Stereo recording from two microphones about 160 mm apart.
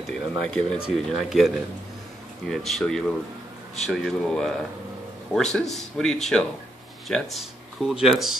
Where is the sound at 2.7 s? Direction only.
Centre (ahead or behind).